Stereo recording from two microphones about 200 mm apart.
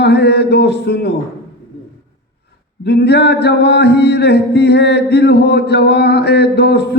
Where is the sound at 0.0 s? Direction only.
55° left (ahead or behind).